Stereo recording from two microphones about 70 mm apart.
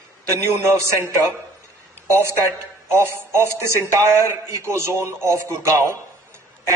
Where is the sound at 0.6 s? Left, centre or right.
Right.